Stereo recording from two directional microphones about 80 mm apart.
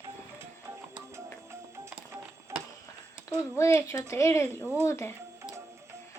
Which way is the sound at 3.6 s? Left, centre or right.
Left.